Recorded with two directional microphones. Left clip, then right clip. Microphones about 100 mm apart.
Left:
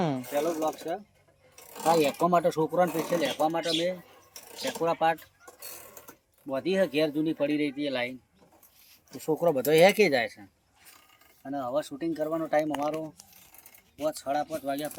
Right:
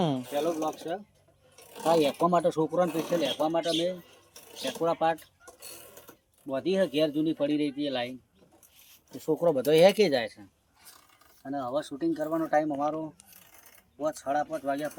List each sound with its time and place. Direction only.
0.0 s pulleys: 10° right (ahead or behind)
0.3 s speech: 5° left (ahead or behind)
1.7 s speech: 20° left (ahead or behind)
6.1 s speech: 5° left (ahead or behind)
9.1 s speech: 15° left (ahead or behind)
11.4 s speech: 5° left (ahead or behind)
14.0 s speech: centre (ahead or behind)